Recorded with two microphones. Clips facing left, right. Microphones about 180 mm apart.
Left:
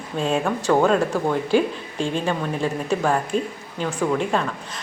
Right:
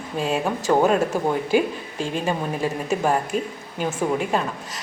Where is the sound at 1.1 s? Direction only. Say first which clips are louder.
Left 1 dB; 15° right (ahead or behind).